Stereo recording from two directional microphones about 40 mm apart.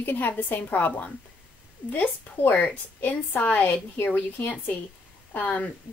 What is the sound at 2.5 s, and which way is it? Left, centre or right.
A woman's voice, left.